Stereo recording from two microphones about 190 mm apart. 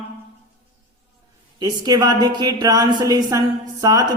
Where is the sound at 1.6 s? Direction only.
20° right (ahead or behind).